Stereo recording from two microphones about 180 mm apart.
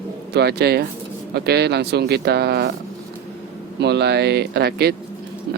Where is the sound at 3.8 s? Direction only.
70° right (ahead or behind).